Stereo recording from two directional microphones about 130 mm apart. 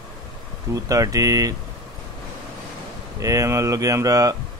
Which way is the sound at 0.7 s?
25° right (ahead or behind).